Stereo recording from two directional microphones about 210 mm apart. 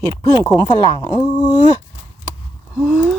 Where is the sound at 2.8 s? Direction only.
Centre (ahead or behind).